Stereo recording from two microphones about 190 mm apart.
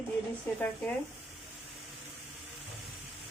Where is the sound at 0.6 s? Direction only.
5° left (ahead or behind).